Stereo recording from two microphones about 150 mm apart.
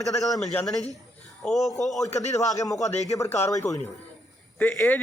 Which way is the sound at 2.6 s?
20° left (ahead or behind).